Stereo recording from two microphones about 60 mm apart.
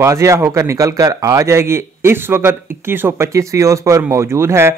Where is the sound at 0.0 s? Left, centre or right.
Right.